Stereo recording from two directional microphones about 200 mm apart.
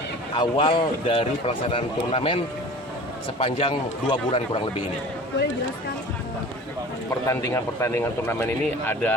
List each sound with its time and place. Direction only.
0.3 s a man's voice: 25° left (ahead or behind)
7.1 s a man's voice: 15° left (ahead or behind)